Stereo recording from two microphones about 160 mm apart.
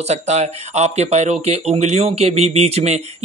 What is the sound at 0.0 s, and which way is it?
Speech, 45° right (ahead or behind).